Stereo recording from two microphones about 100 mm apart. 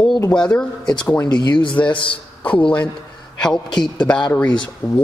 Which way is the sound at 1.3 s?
50° left (ahead or behind).